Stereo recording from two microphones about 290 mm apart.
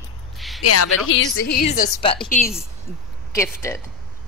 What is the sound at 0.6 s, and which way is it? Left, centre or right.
Speech, left.